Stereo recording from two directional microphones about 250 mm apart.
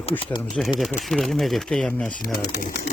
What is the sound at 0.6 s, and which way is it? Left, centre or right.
Speech, centre.